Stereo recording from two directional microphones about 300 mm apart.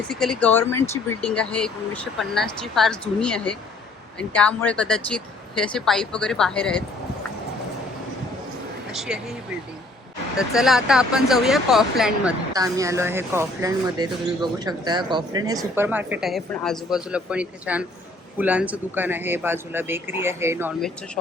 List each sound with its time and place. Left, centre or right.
0.1 s speech: centre
8.9 s speech: centre
10.3 s speech: centre